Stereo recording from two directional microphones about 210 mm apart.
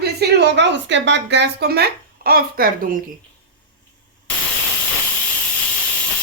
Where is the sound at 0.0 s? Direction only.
50° right (ahead or behind).